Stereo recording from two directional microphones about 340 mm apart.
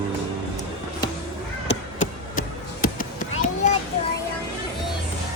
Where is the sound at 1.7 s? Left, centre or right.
Left.